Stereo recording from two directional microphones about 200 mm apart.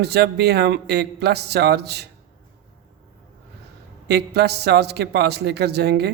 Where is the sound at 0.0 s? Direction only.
55° right (ahead or behind).